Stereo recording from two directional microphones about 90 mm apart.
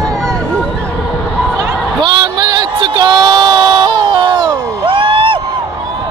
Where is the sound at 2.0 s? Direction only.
60° right (ahead or behind).